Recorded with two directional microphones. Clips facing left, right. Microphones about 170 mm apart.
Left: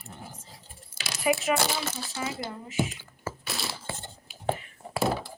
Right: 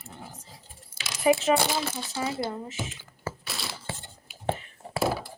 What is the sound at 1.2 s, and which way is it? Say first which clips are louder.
Speech: right 4 dB; 25° right (ahead or behind).